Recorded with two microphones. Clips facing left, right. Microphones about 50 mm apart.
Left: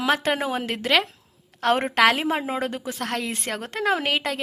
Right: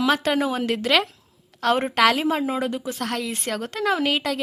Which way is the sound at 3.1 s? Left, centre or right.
Left.